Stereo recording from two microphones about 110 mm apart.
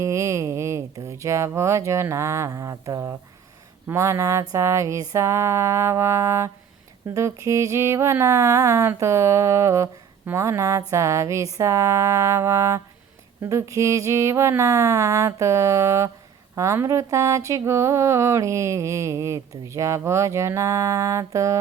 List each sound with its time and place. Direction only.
0.0 s speech: 30° right (ahead or behind)
3.8 s music: 25° right (ahead or behind)